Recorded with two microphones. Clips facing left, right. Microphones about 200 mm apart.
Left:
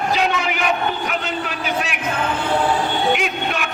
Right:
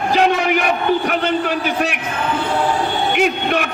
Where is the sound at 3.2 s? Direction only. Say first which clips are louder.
Right 6 dB; 40° right (ahead or behind).